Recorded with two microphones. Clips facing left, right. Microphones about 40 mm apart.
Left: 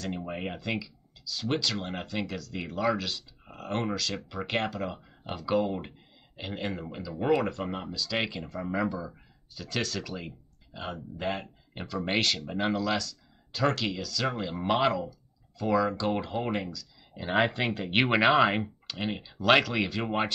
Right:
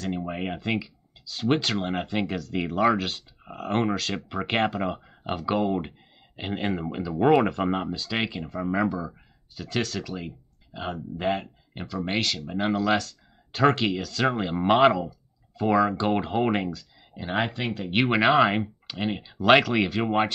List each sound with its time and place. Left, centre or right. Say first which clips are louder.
0.0 s speech: right 4 dB; centre
2.0 s speech: right 6 dB; right
3.5 s speech: right 6 dB; centre
4.1 s speech: right 4 dB; right
8.0 s speech: right 2 dB; centre
13.5 s speech: right 6 dB; right
15.0 s a sound: right 4 dB; right
16.0 s speech: right 6 dB; right
17.1 s speech: left 1 dB; centre